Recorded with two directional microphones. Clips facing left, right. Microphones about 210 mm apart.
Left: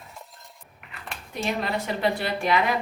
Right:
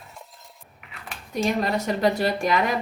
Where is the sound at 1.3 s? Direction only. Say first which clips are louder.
Right 4 dB; 40° right (ahead or behind).